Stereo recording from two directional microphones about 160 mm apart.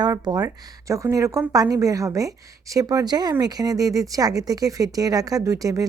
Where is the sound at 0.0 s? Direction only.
25° right (ahead or behind).